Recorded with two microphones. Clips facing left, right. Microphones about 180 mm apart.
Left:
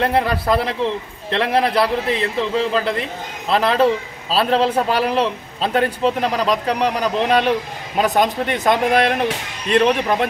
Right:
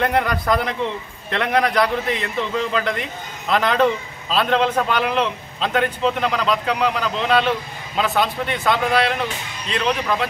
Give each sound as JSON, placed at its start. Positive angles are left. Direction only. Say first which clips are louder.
{"t": 0.0, "sound": "a man's voice", "louder": "left 2 dB", "side_deg": 30}
{"t": 7.9, "sound": "speech", "louder": "left 4 dB", "side_deg": 45}